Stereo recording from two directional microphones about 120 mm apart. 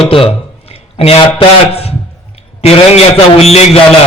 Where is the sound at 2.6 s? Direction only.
60° left (ahead or behind).